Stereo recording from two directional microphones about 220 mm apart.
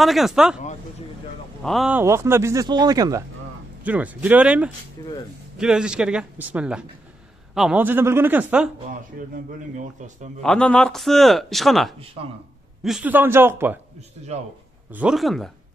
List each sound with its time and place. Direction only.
0.0 s speech: centre (ahead or behind)
1.6 s speech: centre (ahead or behind)
9.3 s a man's voice: 35° right (ahead or behind)
10.4 s speech: 5° left (ahead or behind)
14.9 s speech: 5° right (ahead or behind)